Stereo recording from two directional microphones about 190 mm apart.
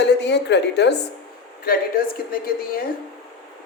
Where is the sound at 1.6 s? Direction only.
50° left (ahead or behind).